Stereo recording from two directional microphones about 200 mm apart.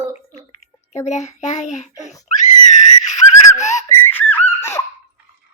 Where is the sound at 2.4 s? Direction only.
35° left (ahead or behind).